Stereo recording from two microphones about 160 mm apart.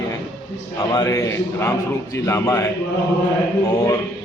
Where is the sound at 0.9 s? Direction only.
20° left (ahead or behind).